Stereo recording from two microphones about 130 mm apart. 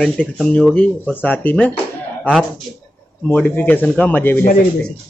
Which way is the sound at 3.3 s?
10° left (ahead or behind).